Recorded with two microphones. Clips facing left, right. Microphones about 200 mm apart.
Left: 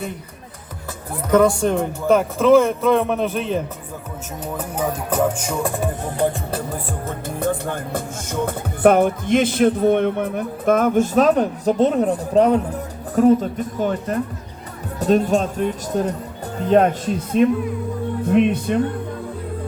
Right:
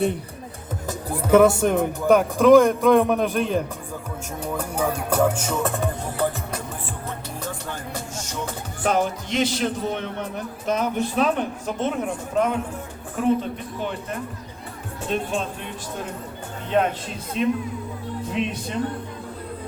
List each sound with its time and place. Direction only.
1.1 s speech: 10° right (ahead or behind)
1.5 s speech: 20° right (ahead or behind)
1.7 s speech: centre (ahead or behind)
4.9 s music: 5° left (ahead or behind)
7.3 s speech: 55° left (ahead or behind)